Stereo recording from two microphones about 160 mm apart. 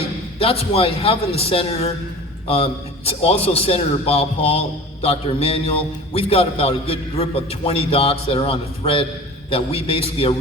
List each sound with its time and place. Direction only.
0.3 s a man's voice: 35° left (ahead or behind)